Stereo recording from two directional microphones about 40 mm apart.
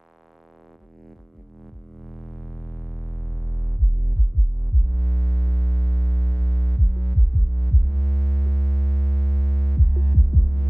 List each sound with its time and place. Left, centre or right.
2.0 s a sound: centre
5.0 s sine wave: left
7.0 s music: left
7.6 s sine wave: centre
9.9 s music: left
10.3 s music: centre